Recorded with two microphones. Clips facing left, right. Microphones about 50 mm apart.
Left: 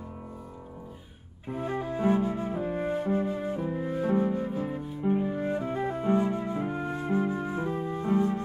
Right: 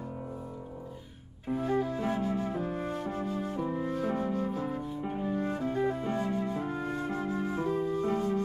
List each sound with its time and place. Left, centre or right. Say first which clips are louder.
1.5 s flute: right 2 dB; centre
3.9 s music: left 4 dB; centre